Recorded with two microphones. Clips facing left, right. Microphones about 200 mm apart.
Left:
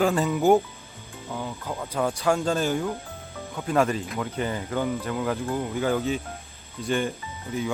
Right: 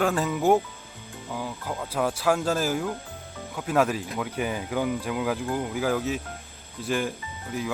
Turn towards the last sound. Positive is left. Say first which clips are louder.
# left 2 dB
turn(degrees=0)  # may be behind; listen again after turning